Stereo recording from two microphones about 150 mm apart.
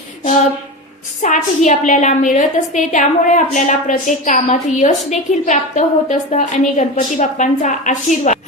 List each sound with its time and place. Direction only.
1.2 s a woman's voice: 55° left (ahead or behind)